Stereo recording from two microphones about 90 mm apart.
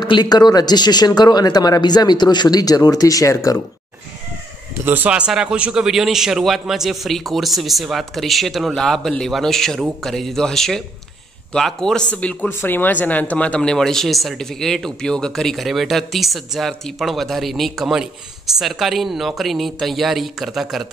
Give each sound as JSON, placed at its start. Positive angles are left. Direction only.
{"t": 0.0, "sound": "speech", "side_deg": 55}
{"t": 4.8, "sound": "speech", "side_deg": -20}
{"t": 5.1, "sound": "speech", "side_deg": -10}